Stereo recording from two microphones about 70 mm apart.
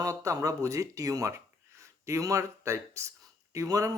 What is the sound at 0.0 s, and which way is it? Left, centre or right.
Speech, right.